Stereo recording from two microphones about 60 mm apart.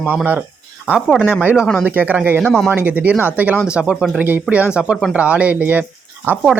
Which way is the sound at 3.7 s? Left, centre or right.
Centre.